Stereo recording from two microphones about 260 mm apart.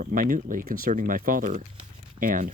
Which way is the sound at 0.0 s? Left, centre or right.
Right.